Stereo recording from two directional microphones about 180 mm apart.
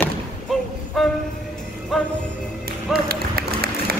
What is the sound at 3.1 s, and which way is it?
Run, 60° right (ahead or behind).